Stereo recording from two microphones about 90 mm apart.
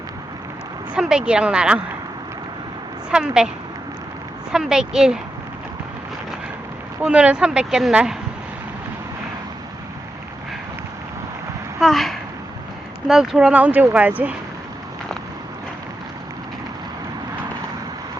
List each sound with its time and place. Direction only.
0.9 s speech: 10° right (ahead or behind)
3.1 s speech: 10° right (ahead or behind)
4.5 s speech: 5° right (ahead or behind)
7.0 s speech: 10° right (ahead or behind)
11.8 s speech: centre (ahead or behind)
13.5 s speech: 15° right (ahead or behind)